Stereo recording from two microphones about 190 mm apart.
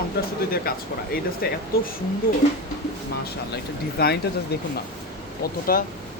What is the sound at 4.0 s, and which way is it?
Speech, 55° left (ahead or behind).